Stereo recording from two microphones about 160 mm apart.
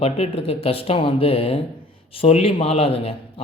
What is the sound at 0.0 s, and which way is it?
Speech, 35° left (ahead or behind).